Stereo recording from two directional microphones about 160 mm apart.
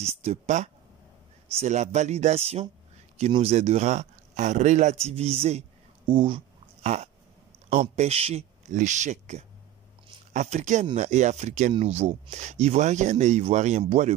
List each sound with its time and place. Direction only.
0.1 s speech: 40° right (ahead or behind)